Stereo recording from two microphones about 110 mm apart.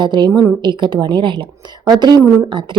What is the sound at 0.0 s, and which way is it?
A woman's voice, 40° right (ahead or behind).